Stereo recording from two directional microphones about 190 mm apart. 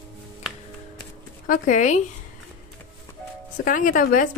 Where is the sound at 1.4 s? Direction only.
40° left (ahead or behind).